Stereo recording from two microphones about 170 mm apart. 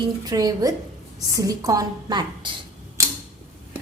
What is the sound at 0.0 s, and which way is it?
A woman's voice, 20° right (ahead or behind).